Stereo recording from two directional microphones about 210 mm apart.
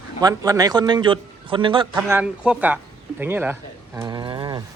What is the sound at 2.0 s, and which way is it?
Speech, 10° right (ahead or behind).